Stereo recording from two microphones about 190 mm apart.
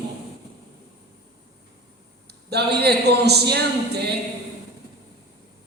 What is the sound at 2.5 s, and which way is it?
A man's voice, 60° right (ahead or behind).